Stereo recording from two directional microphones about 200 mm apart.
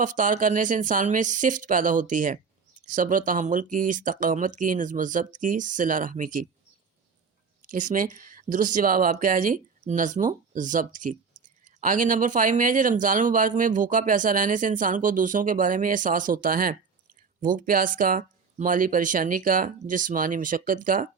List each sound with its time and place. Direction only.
0.0 s speech: 40° right (ahead or behind)
7.7 s speech: 40° right (ahead or behind)